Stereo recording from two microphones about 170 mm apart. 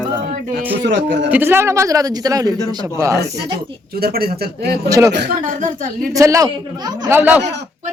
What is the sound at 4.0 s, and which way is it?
Speech, 65° right (ahead or behind).